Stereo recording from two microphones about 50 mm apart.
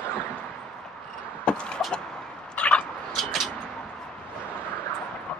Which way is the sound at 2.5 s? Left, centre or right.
Left.